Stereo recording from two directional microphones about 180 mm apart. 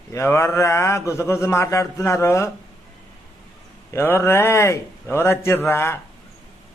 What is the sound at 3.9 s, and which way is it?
Speech, 15° left (ahead or behind).